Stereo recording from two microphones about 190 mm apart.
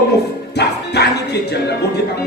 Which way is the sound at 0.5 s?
60° left (ahead or behind).